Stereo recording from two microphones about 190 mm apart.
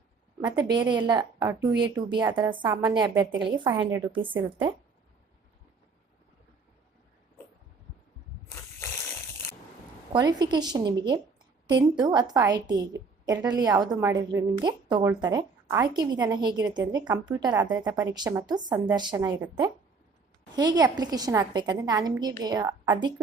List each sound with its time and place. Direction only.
0.4 s a woman's voice: 25° right (ahead or behind)
10.1 s a woman's voice: 20° right (ahead or behind)
20.6 s a woman's voice: 20° right (ahead or behind)